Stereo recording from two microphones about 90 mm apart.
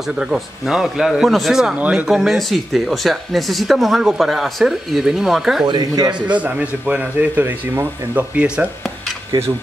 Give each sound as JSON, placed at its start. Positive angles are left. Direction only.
{"t": 0.2, "sound": "speech", "side_deg": -5}
{"t": 1.8, "sound": "speech", "side_deg": -15}
{"t": 2.0, "sound": "speech", "side_deg": 0}
{"t": 5.7, "sound": "speech", "side_deg": -50}
{"t": 6.2, "sound": "speech", "side_deg": -15}